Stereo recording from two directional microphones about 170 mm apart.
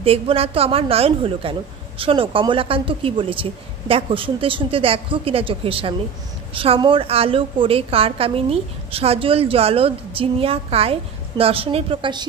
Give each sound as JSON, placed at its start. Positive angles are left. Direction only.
{"t": 0.0, "sound": "a woman's voice", "side_deg": -35}